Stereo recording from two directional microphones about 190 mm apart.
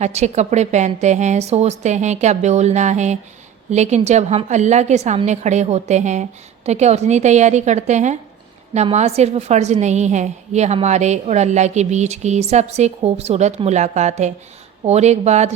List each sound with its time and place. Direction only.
0.0 s a woman's voice: 35° right (ahead or behind)